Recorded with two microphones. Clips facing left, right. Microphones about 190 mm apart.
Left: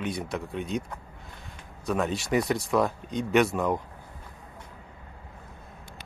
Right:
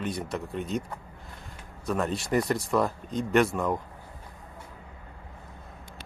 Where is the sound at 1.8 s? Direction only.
Centre (ahead or behind).